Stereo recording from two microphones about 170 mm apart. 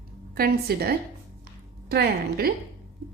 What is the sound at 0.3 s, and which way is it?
A woman's voice, 65° right (ahead or behind).